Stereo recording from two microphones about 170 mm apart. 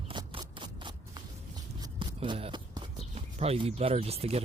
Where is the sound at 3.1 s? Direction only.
35° right (ahead or behind).